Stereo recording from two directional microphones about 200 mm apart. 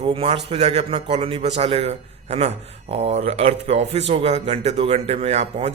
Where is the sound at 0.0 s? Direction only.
30° right (ahead or behind).